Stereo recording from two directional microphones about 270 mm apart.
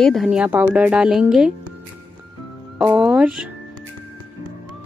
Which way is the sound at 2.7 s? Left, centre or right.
Centre.